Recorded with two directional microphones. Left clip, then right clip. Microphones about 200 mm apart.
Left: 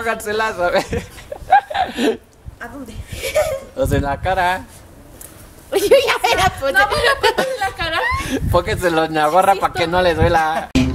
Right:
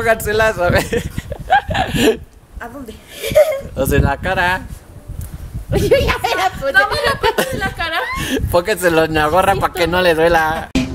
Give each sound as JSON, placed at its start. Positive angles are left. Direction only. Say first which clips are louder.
{"t": 0.0, "sound": "a man's voice", "louder": "right 5 dB", "side_deg": -35}
{"t": 1.5, "sound": "a sound", "louder": "even", "side_deg": -30}
{"t": 3.2, "sound": "a sound", "louder": "right 6 dB", "side_deg": -25}
{"t": 3.7, "sound": "a man's voice", "louder": "right 2 dB", "side_deg": -35}
{"t": 5.7, "sound": "speech", "louder": "left 1 dB", "side_deg": 35}
{"t": 7.5, "sound": "speech", "louder": "even", "side_deg": -20}
{"t": 8.2, "sound": "a man's voice", "louder": "right 2 dB", "side_deg": -30}
{"t": 10.5, "sound": "speech", "louder": "left 1 dB", "side_deg": 0}